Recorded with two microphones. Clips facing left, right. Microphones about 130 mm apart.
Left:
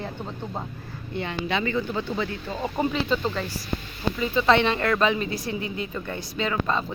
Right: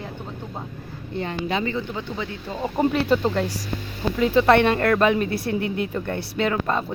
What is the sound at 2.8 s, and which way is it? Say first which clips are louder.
Speech: right 5 dB; 60° right (ahead or behind).